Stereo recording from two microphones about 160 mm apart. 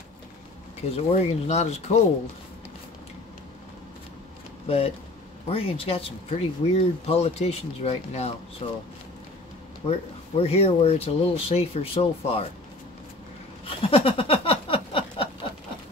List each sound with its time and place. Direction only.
0.9 s speech: 40° left (ahead or behind)
4.6 s speech: 40° left (ahead or behind)
9.8 s speech: 40° left (ahead or behind)
13.7 s a sound: 35° left (ahead or behind)